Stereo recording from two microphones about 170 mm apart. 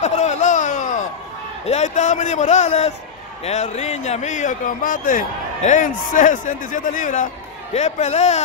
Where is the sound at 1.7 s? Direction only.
40° left (ahead or behind).